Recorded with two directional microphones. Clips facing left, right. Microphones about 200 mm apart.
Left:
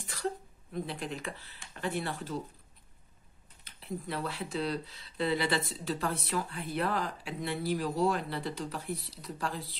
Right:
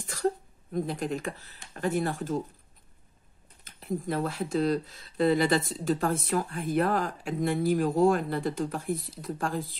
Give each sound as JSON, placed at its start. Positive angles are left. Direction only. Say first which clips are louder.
{"t": 0.0, "sound": "speech", "louder": "right 7 dB", "side_deg": -45}
{"t": 3.6, "sound": "speech", "louder": "right 7 dB", "side_deg": -45}